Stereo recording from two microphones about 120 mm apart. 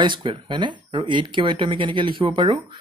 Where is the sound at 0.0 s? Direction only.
40° right (ahead or behind).